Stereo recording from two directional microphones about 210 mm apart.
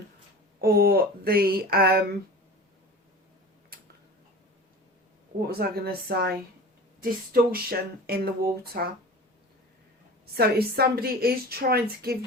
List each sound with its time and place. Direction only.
0.6 s a woman's voice: 45° right (ahead or behind)
5.5 s a woman's voice: 45° right (ahead or behind)
10.3 s a woman's voice: 50° right (ahead or behind)